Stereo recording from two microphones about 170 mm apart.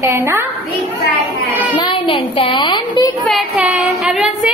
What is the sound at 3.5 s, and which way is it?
Speech, 5° right (ahead or behind).